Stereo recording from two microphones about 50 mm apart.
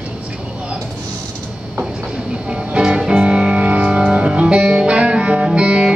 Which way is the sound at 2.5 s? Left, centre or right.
Centre.